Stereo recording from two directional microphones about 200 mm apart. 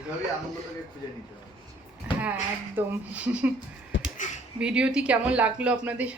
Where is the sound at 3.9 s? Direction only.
70° left (ahead or behind).